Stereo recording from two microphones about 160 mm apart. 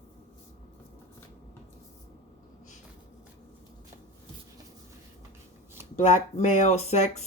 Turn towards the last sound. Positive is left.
turn(degrees=45)  # may be behind; listen again after turning